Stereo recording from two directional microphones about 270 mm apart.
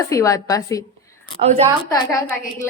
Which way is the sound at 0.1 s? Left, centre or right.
Centre.